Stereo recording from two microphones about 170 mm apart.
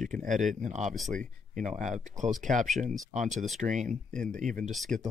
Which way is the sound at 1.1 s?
50° right (ahead or behind).